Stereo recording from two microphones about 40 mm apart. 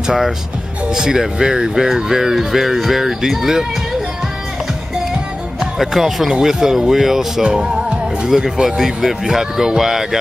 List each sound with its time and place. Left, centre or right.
0.0 s speech: centre
5.6 s speech: centre
7.4 s music: right
8.3 s speech: centre